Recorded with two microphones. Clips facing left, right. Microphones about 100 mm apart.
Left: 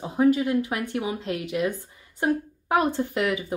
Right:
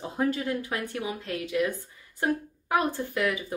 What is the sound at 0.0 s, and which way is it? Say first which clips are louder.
Speech: left 7 dB; 15° left (ahead or behind).